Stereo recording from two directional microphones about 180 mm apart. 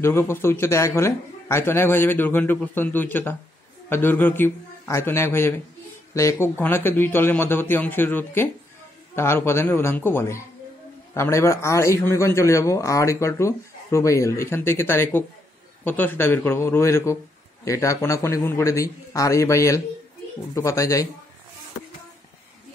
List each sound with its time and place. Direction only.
0.0 s a man's voice: 15° left (ahead or behind)